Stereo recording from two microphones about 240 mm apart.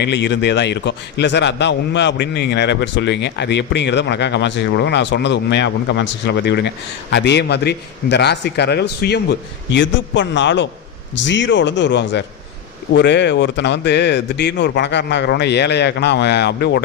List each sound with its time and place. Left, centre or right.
0.0 s a man's voice: left